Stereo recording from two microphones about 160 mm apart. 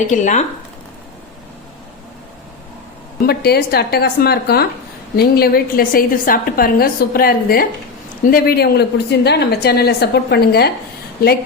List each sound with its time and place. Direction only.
0.1 s speech: 50° left (ahead or behind)
3.2 s a woman's voice: 80° left